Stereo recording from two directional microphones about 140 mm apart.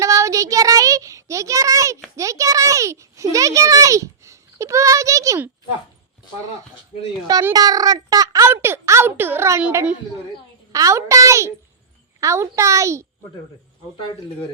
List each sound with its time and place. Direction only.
0.0 s child singing: 20° right (ahead or behind)
2.1 s a child's voice: 20° right (ahead or behind)
7.5 s a child's voice: 25° right (ahead or behind)
10.7 s a child's voice: 25° right (ahead or behind)